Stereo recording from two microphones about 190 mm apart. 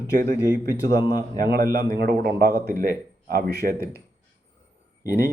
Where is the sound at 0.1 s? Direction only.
55° right (ahead or behind).